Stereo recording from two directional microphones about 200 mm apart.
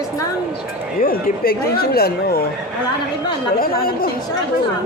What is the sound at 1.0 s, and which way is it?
Speech, 50° left (ahead or behind).